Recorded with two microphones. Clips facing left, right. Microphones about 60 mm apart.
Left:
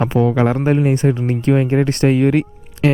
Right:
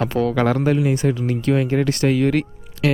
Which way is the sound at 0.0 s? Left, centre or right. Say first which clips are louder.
Left 3 dB; left.